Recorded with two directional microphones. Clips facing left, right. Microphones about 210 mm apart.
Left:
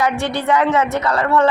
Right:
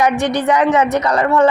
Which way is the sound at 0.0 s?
20° right (ahead or behind).